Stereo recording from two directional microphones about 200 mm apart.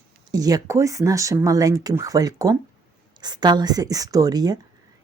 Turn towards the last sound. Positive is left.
turn(degrees=-20)  # may be behind; listen again after turning